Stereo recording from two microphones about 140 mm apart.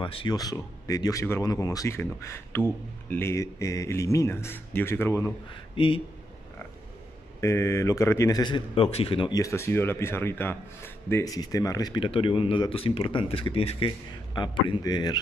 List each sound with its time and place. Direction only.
0.0 s speech: 40° left (ahead or behind); by 5.3 s 15° left (ahead or behind)
5.8 s a man's voice: 35° left (ahead or behind)
7.3 s speech: 20° left (ahead or behind); by 9.3 s 40° left (ahead or behind)
9.3 s a man's voice: 20° left (ahead or behind)